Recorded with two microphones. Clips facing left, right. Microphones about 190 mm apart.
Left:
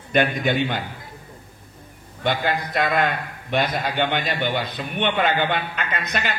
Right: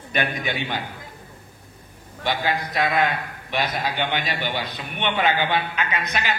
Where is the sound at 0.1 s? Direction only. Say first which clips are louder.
Left 6 dB; 55° left (ahead or behind).